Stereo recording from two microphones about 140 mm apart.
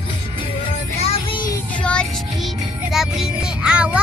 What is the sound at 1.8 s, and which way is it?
Music, 10° left (ahead or behind).